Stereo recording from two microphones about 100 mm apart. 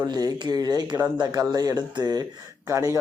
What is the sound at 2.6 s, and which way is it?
Speech, 30° right (ahead or behind).